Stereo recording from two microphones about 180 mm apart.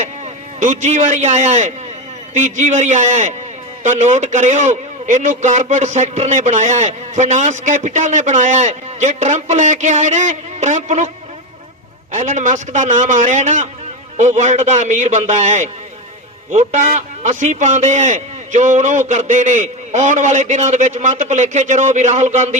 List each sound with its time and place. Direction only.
0.6 s a man's voice: 40° right (ahead or behind)
12.1 s a man's voice: 40° right (ahead or behind)